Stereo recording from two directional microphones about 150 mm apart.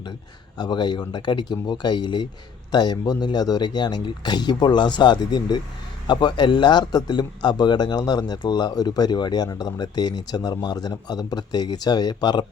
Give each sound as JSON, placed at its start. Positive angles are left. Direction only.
{"t": 0.6, "sound": "speech", "side_deg": 30}